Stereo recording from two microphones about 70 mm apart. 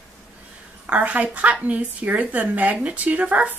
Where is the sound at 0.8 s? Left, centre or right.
Right.